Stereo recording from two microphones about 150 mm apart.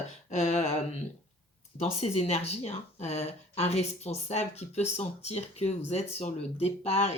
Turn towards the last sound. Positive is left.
turn(degrees=45)  # may be behind; listen again after turning